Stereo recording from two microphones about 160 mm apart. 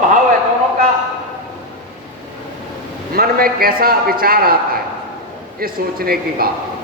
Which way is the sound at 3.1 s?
65° right (ahead or behind).